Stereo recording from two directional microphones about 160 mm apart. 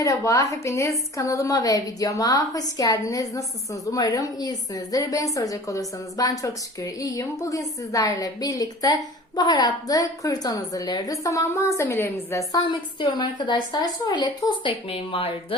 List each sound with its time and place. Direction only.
0.0 s a woman's voice: 20° left (ahead or behind); by 15.5 s 35° left (ahead or behind)